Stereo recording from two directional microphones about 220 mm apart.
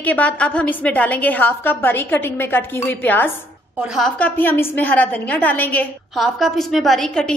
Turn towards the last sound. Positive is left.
turn(degrees=0)  # may be behind; listen again after turning